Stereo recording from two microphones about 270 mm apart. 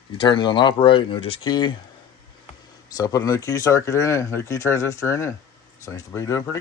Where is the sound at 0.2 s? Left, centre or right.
Centre.